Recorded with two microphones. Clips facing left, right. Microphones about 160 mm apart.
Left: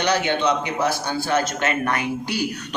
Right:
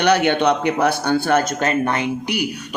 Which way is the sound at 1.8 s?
25° right (ahead or behind).